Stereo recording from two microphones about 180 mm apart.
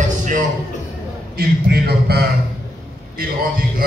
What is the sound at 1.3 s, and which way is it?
Speech, 60° right (ahead or behind).